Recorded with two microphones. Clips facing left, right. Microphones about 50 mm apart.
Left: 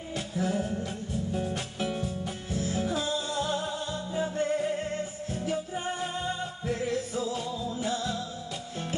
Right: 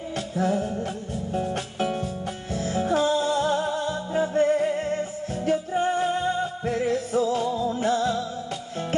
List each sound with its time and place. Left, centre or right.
0.1 s music: right